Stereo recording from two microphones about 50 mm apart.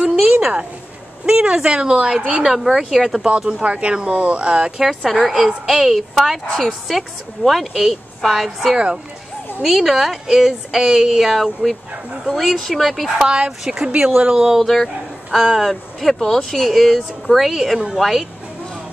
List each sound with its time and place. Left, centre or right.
0.0 s a sound: right
1.2 s speech: right
2.4 s a woman's voice: centre
3.6 s speech: right
4.8 s a woman's voice: centre
8.7 s a woman's voice: centre
9.6 s a woman's voice: centre
13.2 s a woman's voice: centre
14.6 s speech: centre
15.3 s a woman's voice: centre